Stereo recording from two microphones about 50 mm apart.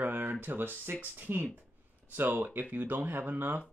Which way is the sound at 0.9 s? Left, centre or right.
Right.